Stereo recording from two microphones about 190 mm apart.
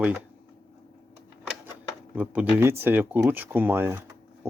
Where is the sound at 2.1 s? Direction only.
10° right (ahead or behind).